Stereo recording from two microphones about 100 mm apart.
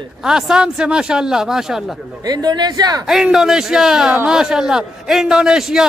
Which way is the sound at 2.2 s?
45° right (ahead or behind).